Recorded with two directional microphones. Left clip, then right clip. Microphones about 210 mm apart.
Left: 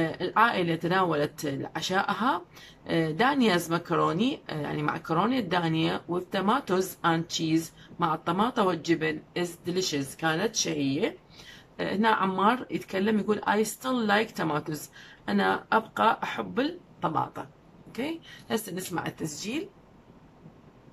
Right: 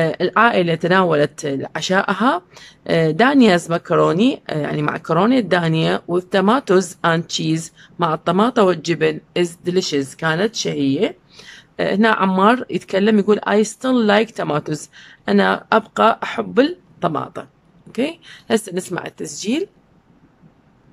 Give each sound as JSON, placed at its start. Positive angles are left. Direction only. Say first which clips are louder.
{"t": 0.0, "sound": "speech", "louder": "right 9 dB", "side_deg": -50}